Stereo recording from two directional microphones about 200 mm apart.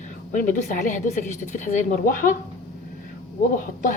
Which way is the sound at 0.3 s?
40° left (ahead or behind).